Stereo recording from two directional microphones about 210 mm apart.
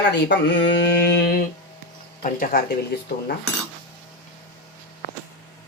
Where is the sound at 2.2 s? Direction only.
40° left (ahead or behind).